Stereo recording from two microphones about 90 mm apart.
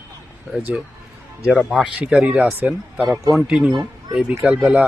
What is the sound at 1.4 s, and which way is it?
Speech, 5° left (ahead or behind).